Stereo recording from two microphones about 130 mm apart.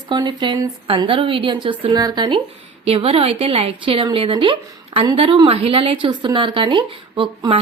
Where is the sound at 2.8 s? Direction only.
50° right (ahead or behind).